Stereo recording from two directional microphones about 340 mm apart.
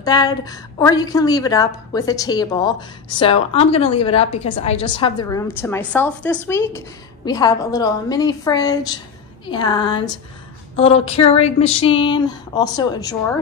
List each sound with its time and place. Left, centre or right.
0.0 s a woman's voice: centre